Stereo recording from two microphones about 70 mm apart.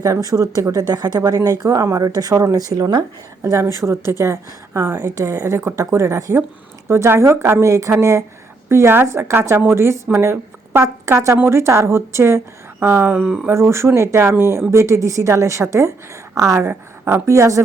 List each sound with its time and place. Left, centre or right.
0.0 s speech: right
3.4 s a woman's voice: right
13.1 s speech: centre
13.5 s a woman's voice: right